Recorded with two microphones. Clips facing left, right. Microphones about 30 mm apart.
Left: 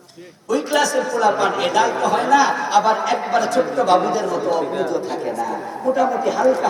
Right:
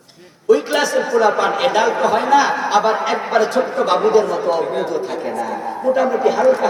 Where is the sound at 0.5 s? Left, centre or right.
Right.